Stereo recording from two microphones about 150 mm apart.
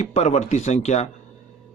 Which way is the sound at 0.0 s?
50° left (ahead or behind).